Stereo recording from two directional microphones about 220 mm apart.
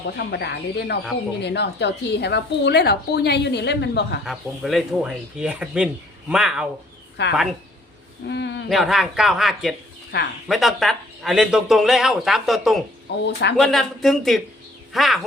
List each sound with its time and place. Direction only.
0.3 s a woman's voice: 50° left (ahead or behind)
4.3 s speech: centre (ahead or behind)
7.2 s a woman's voice: 50° left (ahead or behind)
8.7 s speech: centre (ahead or behind)
10.1 s a woman's voice: 50° left (ahead or behind)
10.5 s speech: centre (ahead or behind)
13.1 s a woman's voice: 50° left (ahead or behind)
13.6 s speech: centre (ahead or behind)